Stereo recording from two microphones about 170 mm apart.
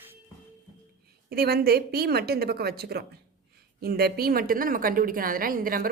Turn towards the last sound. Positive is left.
turn(degrees=-55)  # may be behind; listen again after turning